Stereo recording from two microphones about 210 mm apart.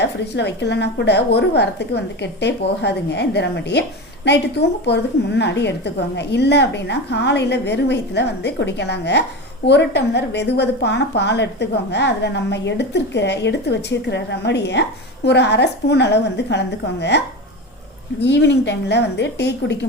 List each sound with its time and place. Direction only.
0.0 s a woman's voice: 55° left (ahead or behind)